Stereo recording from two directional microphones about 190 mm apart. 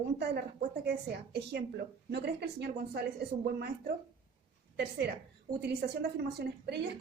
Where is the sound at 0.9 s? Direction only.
55° right (ahead or behind).